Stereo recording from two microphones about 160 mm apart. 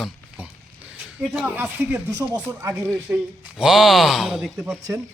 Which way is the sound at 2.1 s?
20° right (ahead or behind).